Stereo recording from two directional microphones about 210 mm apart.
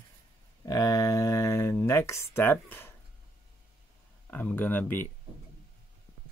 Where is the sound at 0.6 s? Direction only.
15° left (ahead or behind).